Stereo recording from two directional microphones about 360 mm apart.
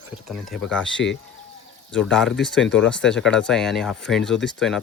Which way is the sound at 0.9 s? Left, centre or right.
Left.